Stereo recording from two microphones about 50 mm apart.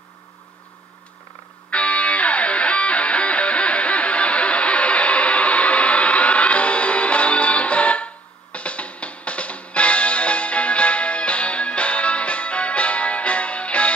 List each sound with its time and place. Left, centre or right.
1.7 s music: left